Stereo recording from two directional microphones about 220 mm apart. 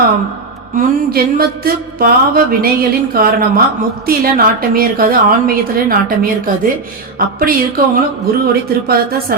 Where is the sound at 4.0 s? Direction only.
40° right (ahead or behind).